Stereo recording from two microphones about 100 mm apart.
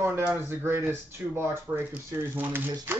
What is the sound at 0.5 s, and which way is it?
Speech, 25° right (ahead or behind).